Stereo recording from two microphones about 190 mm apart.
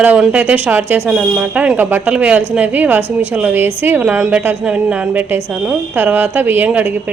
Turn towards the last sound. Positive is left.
turn(degrees=-10)  # may be behind; listen again after turning